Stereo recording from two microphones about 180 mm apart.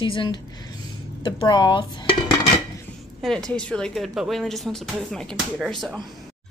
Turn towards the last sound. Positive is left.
turn(degrees=0)  # may be behind; listen again after turning